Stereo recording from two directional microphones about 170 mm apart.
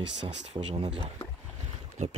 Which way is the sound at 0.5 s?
35° right (ahead or behind).